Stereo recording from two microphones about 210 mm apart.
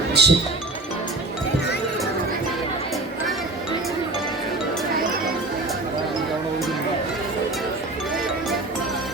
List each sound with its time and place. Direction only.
0.1 s speech: 55° right (ahead or behind)